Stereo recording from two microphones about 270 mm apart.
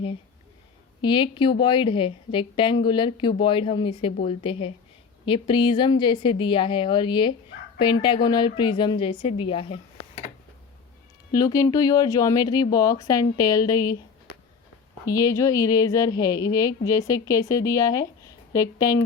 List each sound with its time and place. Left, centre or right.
1.0 s a woman's voice: centre
11.3 s a woman's voice: centre
15.0 s a woman's voice: centre